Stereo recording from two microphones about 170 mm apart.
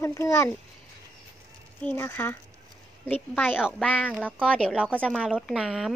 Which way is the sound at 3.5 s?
5° right (ahead or behind).